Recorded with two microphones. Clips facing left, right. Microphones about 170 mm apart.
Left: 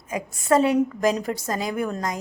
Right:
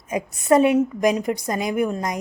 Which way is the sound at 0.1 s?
20° right (ahead or behind).